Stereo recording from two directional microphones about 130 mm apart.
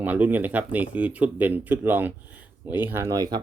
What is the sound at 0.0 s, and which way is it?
Speech, 15° right (ahead or behind).